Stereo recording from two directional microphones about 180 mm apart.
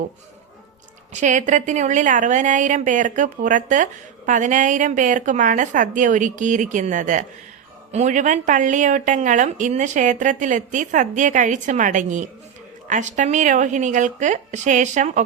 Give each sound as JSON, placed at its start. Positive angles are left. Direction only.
{"t": 1.1, "sound": "speech", "side_deg": -45}